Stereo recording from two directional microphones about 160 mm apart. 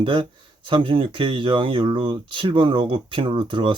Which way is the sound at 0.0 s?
30° right (ahead or behind).